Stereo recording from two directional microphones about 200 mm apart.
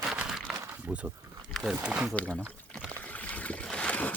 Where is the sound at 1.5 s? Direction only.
5° right (ahead or behind).